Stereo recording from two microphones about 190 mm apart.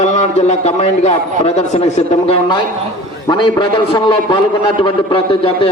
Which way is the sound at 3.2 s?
25° left (ahead or behind).